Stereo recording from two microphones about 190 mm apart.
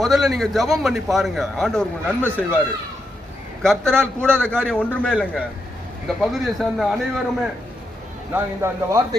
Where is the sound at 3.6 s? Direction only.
Centre (ahead or behind).